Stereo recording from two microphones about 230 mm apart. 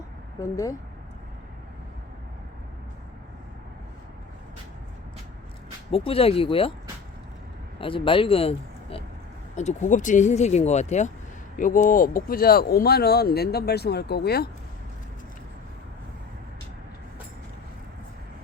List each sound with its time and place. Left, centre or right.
0.3 s a woman's voice: centre
5.9 s speech: left
7.8 s speech: left